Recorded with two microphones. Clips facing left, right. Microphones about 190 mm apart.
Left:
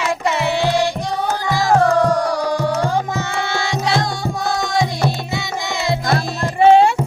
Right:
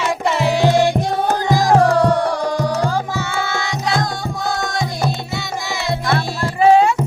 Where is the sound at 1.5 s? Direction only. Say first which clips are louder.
Right 1 dB; 35° right (ahead or behind).